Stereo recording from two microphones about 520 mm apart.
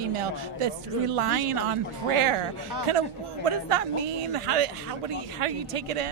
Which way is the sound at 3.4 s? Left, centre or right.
Right.